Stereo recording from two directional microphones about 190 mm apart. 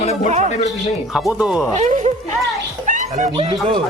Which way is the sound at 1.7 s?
40° right (ahead or behind).